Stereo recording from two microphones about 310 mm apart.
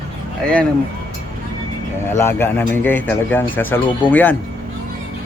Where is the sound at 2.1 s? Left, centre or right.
Centre.